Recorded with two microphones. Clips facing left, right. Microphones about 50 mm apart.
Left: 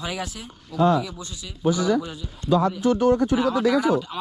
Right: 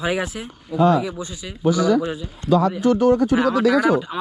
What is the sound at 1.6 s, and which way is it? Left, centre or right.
Speech, left.